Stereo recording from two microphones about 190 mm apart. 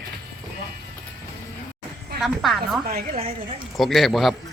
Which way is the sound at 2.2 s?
Centre (ahead or behind).